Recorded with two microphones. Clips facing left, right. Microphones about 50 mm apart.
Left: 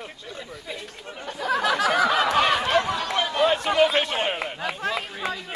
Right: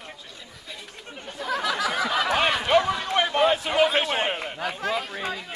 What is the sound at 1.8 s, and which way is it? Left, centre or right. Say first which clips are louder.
Snicker: left 5 dB; left.